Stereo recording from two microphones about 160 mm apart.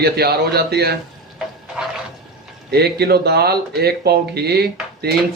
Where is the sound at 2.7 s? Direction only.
85° right.